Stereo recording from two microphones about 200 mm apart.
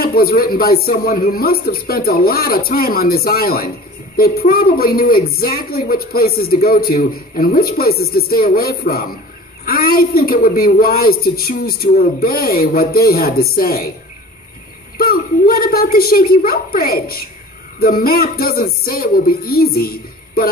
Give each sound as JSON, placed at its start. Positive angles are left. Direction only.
{"t": 0.0, "sound": "a woman's voice", "side_deg": 50}
{"t": 15.0, "sound": "a woman's voice", "side_deg": 50}